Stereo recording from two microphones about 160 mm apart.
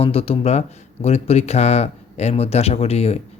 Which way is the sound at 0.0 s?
40° left (ahead or behind).